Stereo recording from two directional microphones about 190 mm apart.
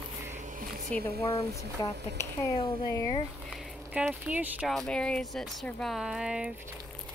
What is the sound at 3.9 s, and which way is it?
Speech, 5° right (ahead or behind).